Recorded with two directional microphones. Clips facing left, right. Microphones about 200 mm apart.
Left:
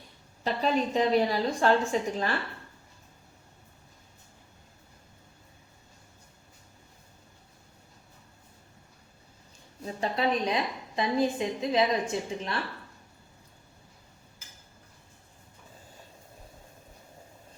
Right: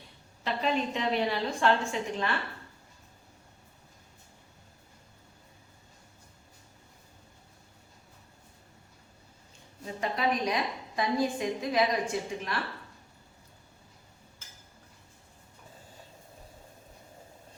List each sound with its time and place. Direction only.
0.4 s a woman's voice: 40° left (ahead or behind)
9.8 s a woman's voice: 30° left (ahead or behind)